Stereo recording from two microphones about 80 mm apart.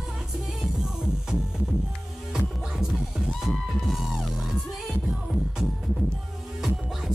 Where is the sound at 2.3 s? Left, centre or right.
Centre.